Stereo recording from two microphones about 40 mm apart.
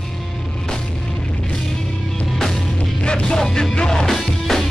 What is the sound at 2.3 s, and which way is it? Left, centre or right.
Music, centre.